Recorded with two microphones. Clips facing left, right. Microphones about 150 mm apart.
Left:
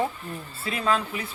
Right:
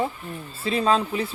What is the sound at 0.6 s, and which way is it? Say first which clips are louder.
Speech: right 4 dB; 25° right (ahead or behind).